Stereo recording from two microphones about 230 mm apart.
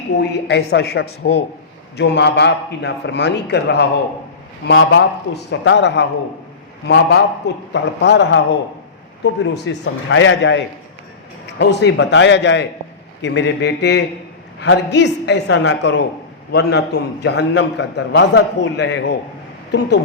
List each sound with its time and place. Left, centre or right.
0.2 s a man's voice: left